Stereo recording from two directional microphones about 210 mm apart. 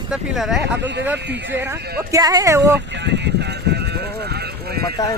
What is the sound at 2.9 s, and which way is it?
Vehicle, 55° right (ahead or behind).